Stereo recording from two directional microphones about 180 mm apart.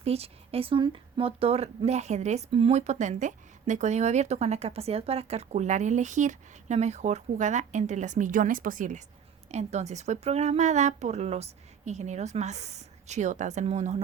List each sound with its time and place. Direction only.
0.0 s speech: 35° right (ahead or behind)